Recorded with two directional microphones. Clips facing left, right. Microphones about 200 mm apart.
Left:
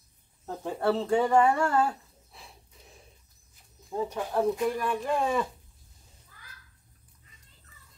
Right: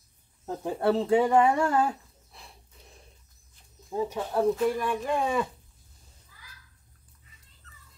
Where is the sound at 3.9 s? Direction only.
5° right (ahead or behind).